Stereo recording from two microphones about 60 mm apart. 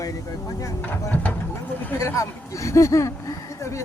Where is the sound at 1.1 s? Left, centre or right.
Left.